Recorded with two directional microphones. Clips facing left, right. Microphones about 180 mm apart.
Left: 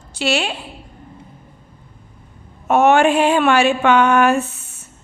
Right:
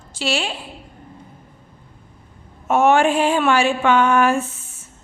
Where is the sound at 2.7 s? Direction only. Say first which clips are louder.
Left 2 dB; 65° left (ahead or behind).